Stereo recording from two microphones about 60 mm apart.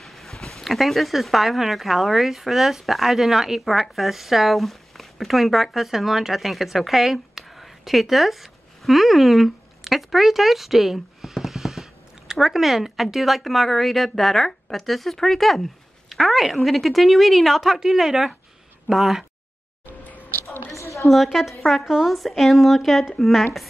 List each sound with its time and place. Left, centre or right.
0.0 s a woman's voice: centre
20.7 s a sound: left
21.1 s a woman's voice: centre